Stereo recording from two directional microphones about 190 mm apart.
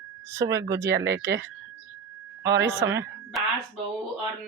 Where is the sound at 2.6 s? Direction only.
70° right (ahead or behind).